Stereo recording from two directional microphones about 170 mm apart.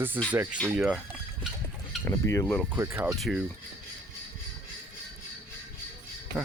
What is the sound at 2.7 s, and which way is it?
Speech, 15° right (ahead or behind).